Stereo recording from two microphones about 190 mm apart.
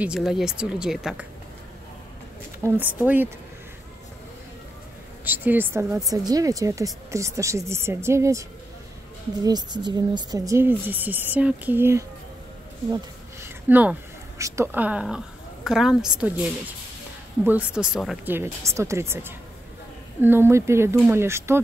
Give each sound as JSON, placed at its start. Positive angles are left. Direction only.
{"t": 0.0, "sound": "a woman's voice", "side_deg": -5}
{"t": 2.6, "sound": "speech", "side_deg": -15}
{"t": 5.2, "sound": "a woman's voice", "side_deg": -10}